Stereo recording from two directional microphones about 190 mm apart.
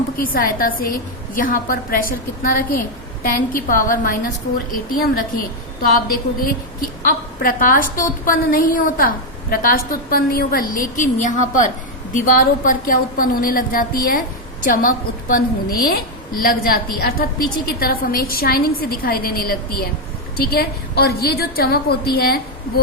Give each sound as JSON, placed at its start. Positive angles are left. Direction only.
{"t": 0.2, "sound": "a woman's voice", "side_deg": 50}
{"t": 7.0, "sound": "a woman's voice", "side_deg": 45}